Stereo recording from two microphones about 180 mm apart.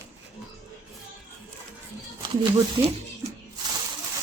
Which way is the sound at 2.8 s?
15° right (ahead or behind).